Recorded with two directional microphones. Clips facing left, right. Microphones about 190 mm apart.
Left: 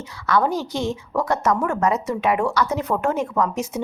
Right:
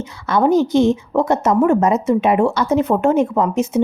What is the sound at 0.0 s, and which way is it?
A woman's voice, 20° right (ahead or behind).